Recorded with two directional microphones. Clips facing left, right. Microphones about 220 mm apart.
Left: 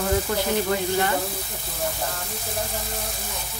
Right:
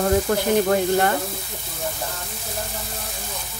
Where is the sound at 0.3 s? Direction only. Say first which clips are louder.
Right 4 dB; 50° right (ahead or behind).